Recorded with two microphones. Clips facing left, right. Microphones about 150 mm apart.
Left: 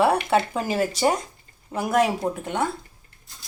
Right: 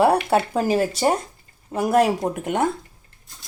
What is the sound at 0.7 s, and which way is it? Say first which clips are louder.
A woman's voice: right 3 dB; 35° right (ahead or behind).